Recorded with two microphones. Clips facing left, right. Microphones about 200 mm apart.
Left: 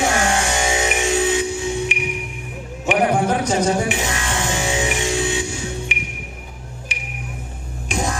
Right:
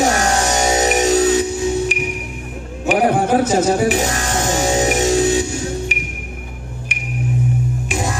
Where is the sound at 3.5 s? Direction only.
40° right (ahead or behind).